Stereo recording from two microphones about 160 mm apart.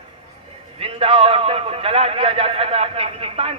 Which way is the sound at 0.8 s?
40° right (ahead or behind).